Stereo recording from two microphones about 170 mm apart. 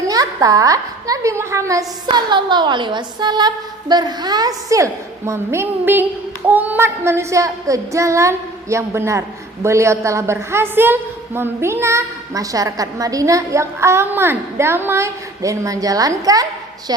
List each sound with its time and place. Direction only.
0.1 s a woman's voice: 20° right (ahead or behind)